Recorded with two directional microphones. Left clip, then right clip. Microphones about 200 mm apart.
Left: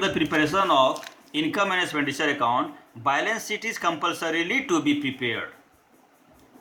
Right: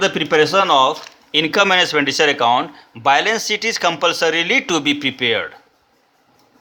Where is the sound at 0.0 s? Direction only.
70° right (ahead or behind).